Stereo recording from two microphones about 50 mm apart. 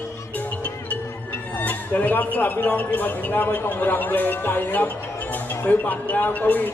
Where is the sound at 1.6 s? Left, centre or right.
Left.